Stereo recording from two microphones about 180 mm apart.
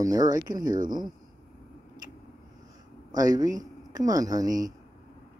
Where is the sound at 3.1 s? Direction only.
20° right (ahead or behind).